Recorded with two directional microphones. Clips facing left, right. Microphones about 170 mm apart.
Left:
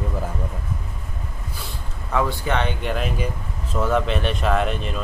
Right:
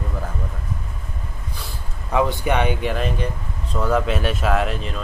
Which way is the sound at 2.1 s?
15° right (ahead or behind).